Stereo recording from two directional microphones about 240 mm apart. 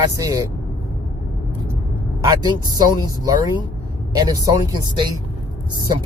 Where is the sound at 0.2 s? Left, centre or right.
Centre.